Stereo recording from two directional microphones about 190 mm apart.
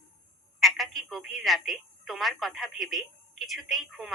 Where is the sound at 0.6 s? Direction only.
Centre (ahead or behind).